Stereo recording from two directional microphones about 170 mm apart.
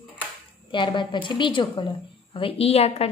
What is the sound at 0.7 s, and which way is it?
A woman's voice, 30° left (ahead or behind).